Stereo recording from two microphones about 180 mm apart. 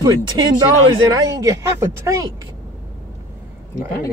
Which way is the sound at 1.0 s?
20° right (ahead or behind).